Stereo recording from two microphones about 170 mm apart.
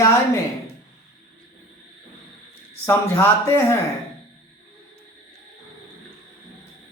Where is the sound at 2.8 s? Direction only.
15° left (ahead or behind).